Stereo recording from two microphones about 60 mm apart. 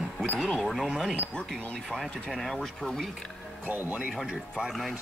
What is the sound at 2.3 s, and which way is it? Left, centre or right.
Speech, centre.